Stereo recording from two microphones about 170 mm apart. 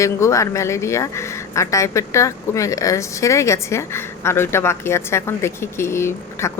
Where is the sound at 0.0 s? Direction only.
15° left (ahead or behind).